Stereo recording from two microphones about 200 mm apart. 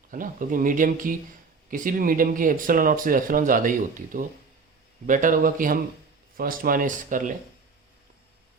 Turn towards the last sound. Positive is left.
turn(degrees=-40)  # may be behind; listen again after turning